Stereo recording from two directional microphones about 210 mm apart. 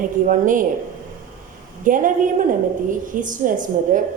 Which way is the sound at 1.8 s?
40° right (ahead or behind).